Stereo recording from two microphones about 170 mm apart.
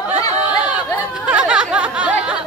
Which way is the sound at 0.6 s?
5° right (ahead or behind).